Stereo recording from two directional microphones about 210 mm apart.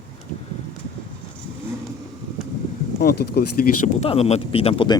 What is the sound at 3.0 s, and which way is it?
Speech, 50° left (ahead or behind).